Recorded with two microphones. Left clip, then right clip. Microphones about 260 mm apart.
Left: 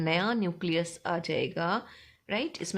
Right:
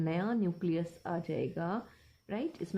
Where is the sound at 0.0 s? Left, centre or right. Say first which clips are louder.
Left 6 dB; left.